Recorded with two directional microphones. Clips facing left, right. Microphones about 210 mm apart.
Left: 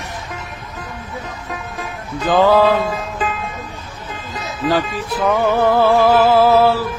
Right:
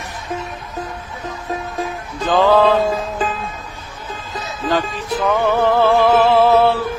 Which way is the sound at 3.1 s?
35° right (ahead or behind).